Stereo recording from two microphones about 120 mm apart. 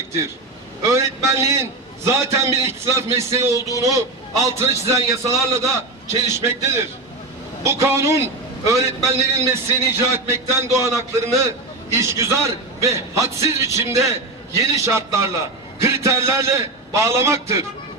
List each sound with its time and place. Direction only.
0.8 s a man's voice: 25° right (ahead or behind)
7.6 s a man's voice: 25° right (ahead or behind)